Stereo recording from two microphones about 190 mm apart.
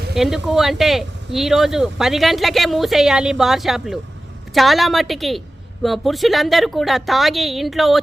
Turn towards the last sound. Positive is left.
turn(degrees=0)  # may be behind; listen again after turning